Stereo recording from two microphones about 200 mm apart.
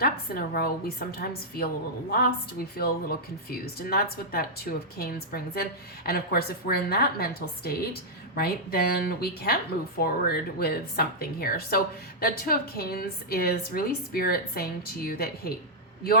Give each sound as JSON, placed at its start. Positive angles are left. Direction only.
{"t": 0.0, "sound": "a woman's voice", "side_deg": 50}